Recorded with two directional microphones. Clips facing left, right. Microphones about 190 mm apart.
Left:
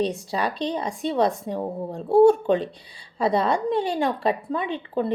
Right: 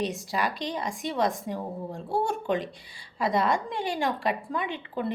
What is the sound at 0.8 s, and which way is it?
A woman's voice, 25° left (ahead or behind).